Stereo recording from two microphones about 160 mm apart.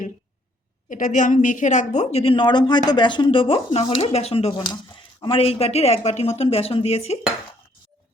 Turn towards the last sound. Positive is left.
turn(degrees=40)  # may be behind; listen again after turning